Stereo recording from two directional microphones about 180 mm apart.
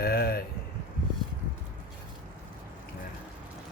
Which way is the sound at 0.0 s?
60° left (ahead or behind).